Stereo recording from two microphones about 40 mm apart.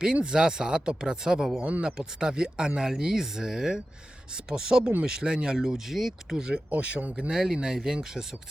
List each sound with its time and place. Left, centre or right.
0.0 s speech: right
2.9 s speech: centre
5.5 s speech: centre
6.3 s speech: centre
6.7 s speech: right
7.3 s speech: centre